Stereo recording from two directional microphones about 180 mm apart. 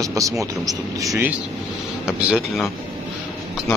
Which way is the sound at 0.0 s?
15° right (ahead or behind).